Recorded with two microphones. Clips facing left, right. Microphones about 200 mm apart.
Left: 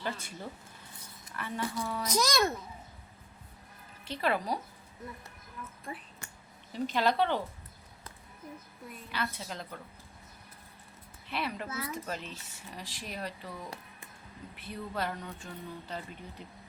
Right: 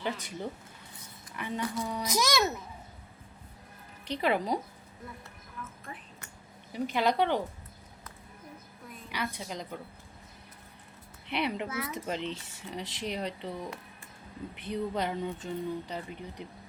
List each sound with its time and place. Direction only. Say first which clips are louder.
0.0 s a child's voice: right 3 dB; 15° right (ahead or behind)
1.4 s a child's voice: right 2 dB; 15° right (ahead or behind)
4.0 s a child's voice: right 3 dB; 15° right (ahead or behind)
6.7 s a child's voice: right 1 dB; 15° right (ahead or behind)
9.1 s a child's voice: right 2 dB; 15° right (ahead or behind)
11.3 s a child's voice: right 4 dB; 20° right (ahead or behind)